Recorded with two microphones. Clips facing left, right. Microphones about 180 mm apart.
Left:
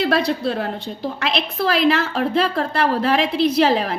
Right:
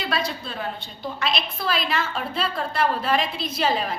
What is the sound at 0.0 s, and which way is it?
A woman's voice, 65° left (ahead or behind).